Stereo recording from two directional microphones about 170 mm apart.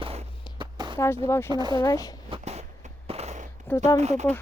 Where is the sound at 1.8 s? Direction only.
20° left (ahead or behind).